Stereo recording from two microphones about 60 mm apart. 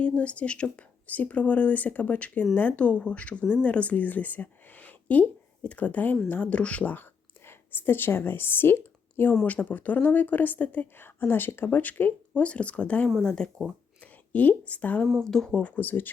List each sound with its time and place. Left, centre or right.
0.2 s a woman's voice: left
9.5 s a woman's voice: left
12.3 s a woman's voice: centre
14.0 s a woman's voice: left
15.2 s speech: centre
15.6 s speech: left